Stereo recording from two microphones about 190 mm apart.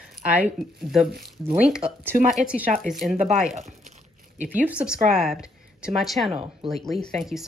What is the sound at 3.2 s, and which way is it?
Speech, 40° right (ahead or behind).